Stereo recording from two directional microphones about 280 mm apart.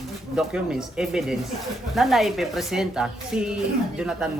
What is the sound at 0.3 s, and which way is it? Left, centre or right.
A woman's voice, centre.